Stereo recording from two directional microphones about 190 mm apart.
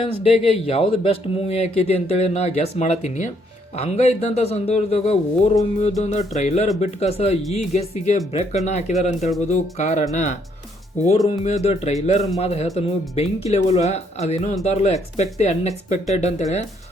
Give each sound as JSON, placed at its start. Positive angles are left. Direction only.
{"t": 0.3, "sound": "speech", "side_deg": 30}
{"t": 11.3, "sound": "speech", "side_deg": 35}